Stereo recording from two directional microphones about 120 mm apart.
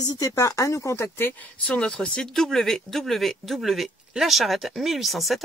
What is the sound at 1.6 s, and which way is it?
Speech, 5° left (ahead or behind).